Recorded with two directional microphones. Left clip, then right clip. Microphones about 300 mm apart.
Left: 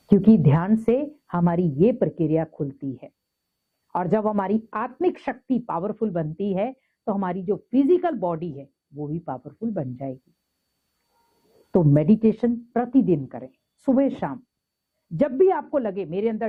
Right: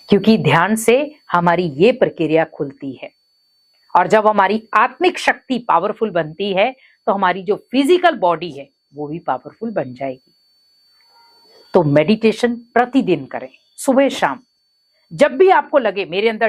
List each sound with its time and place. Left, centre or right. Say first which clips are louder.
0.1 s speech: right 6 dB; centre
11.1 s a sound: right 12 dB; centre
11.9 s speech: right 7 dB; centre